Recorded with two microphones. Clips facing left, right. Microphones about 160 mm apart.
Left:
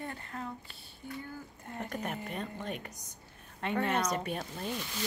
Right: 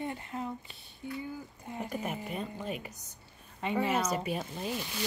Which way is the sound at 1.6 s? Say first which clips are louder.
Right 2 dB; 5° right (ahead or behind).